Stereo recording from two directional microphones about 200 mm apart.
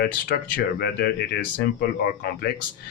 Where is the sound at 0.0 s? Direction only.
50° left (ahead or behind).